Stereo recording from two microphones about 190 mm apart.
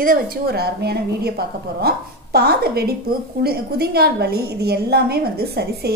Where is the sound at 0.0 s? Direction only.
50° right (ahead or behind).